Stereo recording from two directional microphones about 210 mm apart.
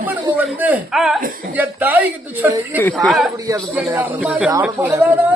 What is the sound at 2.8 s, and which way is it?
Speech, 5° left (ahead or behind).